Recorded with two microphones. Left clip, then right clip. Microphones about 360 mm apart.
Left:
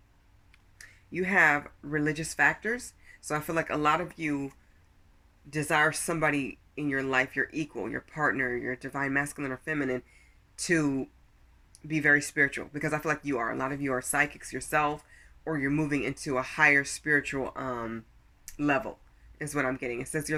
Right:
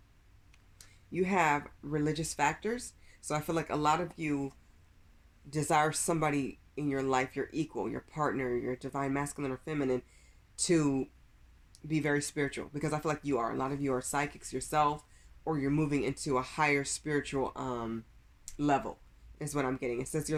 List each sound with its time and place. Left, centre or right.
1.2 s speech: centre
5.5 s speech: centre
12.1 s speech: centre
19.4 s speech: centre